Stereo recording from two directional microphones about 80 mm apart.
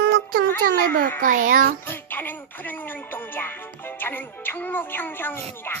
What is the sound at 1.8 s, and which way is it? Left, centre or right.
Music, left.